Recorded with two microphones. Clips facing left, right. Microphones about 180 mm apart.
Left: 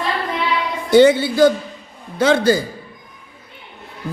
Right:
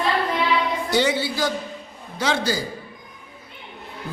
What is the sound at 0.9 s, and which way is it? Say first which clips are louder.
A woman's voice: left 13 dB; 55° left (ahead or behind).